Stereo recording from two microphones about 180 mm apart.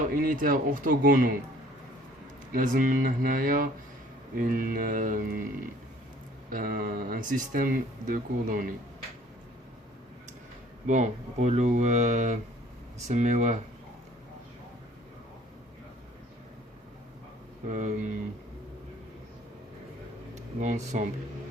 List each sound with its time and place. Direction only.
0.0 s speech: 50° right (ahead or behind)
2.5 s speech: 45° right (ahead or behind)
6.5 s speech: 50° right (ahead or behind)
10.8 s speech: 40° right (ahead or behind)
17.7 s speech: 45° right (ahead or behind)
20.6 s speech: 40° right (ahead or behind)